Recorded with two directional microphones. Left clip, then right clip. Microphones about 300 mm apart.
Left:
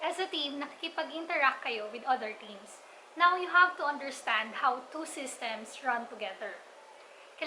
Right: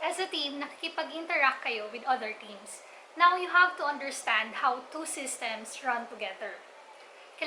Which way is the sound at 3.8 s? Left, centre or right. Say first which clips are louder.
Right 1 dB; centre.